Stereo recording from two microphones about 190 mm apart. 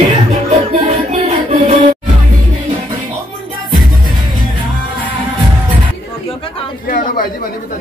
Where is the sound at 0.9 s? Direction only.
35° right (ahead or behind).